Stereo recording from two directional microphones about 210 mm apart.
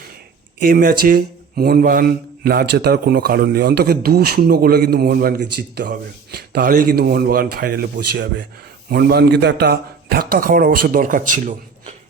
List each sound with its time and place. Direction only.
0.6 s speech: 45° right (ahead or behind)